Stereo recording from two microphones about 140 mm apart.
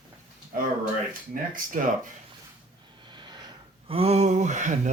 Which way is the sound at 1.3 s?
85° right.